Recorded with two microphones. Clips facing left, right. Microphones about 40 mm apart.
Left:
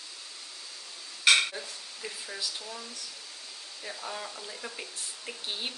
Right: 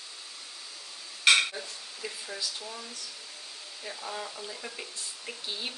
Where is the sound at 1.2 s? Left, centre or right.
Centre.